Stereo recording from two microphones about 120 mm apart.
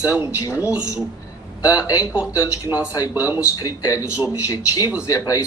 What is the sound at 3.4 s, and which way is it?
A man's voice, 30° left (ahead or behind).